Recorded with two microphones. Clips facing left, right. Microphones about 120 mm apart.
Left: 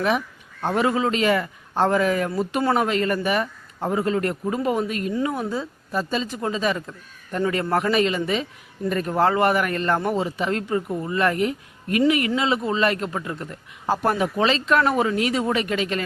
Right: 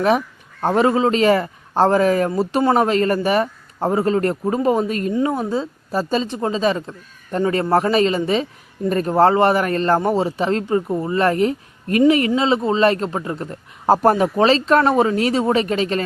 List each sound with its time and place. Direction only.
0.6 s a man's voice: 35° right (ahead or behind)